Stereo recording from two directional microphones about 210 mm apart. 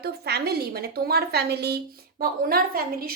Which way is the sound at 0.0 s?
50° right (ahead or behind).